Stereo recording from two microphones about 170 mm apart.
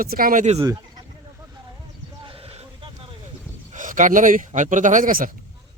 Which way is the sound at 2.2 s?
35° right (ahead or behind).